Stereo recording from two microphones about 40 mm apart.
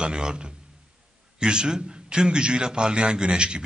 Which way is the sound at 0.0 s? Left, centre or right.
Right.